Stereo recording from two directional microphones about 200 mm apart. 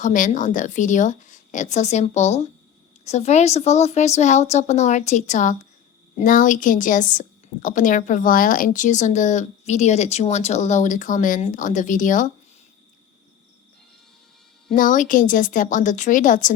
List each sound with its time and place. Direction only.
0.0 s a woman's voice: 40° left (ahead or behind)
14.8 s a woman's voice: 40° left (ahead or behind)